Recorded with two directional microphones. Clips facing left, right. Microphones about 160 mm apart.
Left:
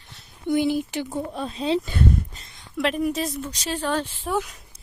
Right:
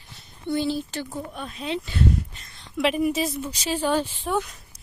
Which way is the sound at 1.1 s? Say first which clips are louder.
Left 5 dB; 30° left (ahead or behind).